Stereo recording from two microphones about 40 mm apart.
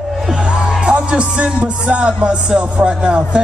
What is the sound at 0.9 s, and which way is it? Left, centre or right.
Music, right.